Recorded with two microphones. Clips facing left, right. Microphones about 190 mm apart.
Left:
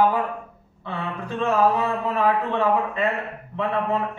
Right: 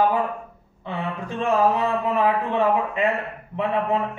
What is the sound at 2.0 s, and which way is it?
A man's voice, 15° right (ahead or behind).